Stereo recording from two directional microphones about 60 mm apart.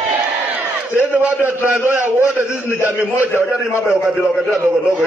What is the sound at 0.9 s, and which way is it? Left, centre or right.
Speech, right.